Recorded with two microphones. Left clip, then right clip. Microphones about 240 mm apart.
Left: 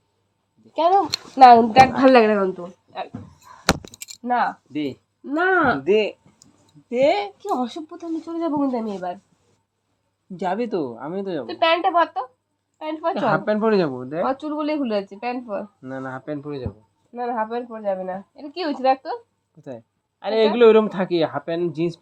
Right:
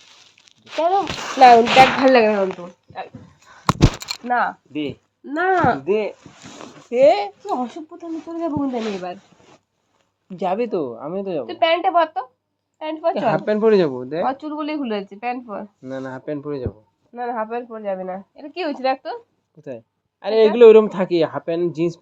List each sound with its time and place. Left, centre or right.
0.8 s speech: left
4.3 s speech: left
10.3 s speech: left